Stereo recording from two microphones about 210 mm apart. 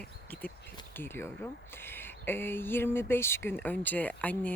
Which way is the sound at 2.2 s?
10° left (ahead or behind).